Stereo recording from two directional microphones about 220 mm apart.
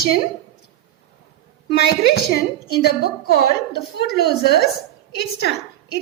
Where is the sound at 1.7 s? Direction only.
45° left (ahead or behind).